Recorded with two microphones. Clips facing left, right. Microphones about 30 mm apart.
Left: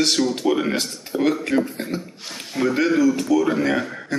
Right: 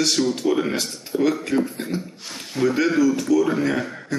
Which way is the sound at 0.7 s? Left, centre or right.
Left.